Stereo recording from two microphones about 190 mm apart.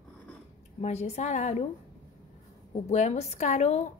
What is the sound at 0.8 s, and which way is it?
Speech, 35° left (ahead or behind).